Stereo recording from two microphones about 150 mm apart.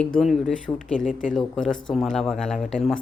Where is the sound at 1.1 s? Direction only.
60° left (ahead or behind).